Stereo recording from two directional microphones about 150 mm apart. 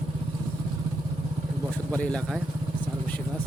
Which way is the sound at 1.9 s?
10° left (ahead or behind).